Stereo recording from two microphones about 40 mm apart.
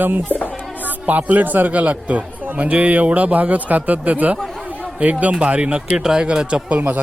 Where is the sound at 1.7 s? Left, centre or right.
Right.